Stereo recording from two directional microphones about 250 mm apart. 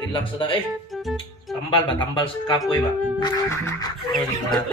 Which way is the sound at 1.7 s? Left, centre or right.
Centre.